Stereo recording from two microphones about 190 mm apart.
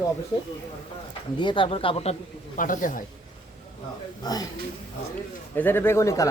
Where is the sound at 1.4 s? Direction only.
25° left (ahead or behind).